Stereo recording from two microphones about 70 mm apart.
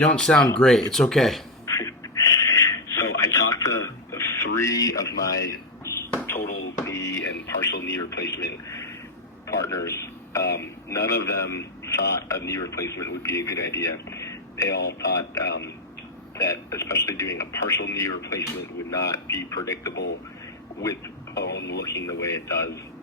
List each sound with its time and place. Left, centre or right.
0.0 s speech: centre
1.6 s a sound: left
9.5 s a man's voice: left
21.8 s speech: left